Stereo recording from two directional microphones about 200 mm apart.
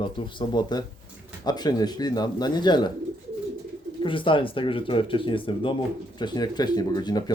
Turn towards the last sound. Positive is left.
turn(degrees=20)  # may be behind; listen again after turning